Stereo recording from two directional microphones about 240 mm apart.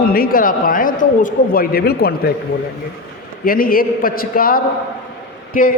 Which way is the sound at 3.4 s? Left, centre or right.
Left.